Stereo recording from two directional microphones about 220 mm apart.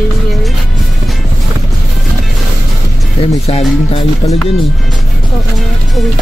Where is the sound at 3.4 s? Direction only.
25° left (ahead or behind).